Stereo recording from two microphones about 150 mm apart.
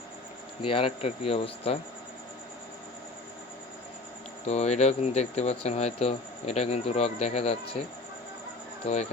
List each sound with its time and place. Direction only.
0.6 s speech: 35° left (ahead or behind)
4.4 s speech: 50° left (ahead or behind)